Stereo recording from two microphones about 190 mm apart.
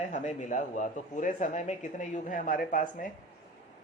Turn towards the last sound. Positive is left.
turn(degrees=45)  # may be behind; listen again after turning